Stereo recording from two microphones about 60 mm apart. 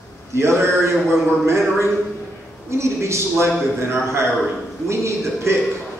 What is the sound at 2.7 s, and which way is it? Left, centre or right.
Speech, right.